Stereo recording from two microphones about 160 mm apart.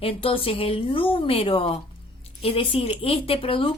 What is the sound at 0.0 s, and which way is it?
A woman's voice, 35° left (ahead or behind).